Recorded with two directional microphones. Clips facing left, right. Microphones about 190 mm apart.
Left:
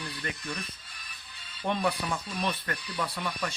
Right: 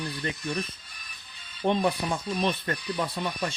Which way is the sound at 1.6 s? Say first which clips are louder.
Right 4 dB; 25° right (ahead or behind).